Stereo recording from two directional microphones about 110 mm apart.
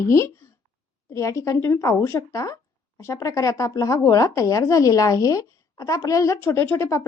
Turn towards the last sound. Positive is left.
turn(degrees=25)  # may be behind; listen again after turning